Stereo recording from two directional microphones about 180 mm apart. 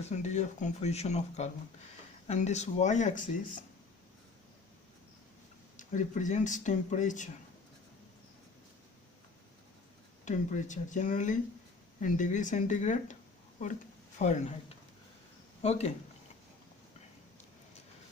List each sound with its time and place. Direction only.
0.0 s speech: 40° left (ahead or behind)
5.7 s speech: 45° left (ahead or behind)
10.2 s speech: 45° left (ahead or behind)
14.2 s speech: 40° left (ahead or behind)
15.6 s speech: 35° left (ahead or behind)